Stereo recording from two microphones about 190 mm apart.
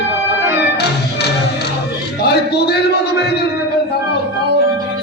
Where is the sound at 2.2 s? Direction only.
60° left (ahead or behind).